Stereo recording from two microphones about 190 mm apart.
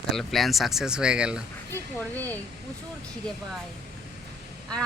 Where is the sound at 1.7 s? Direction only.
10° left (ahead or behind).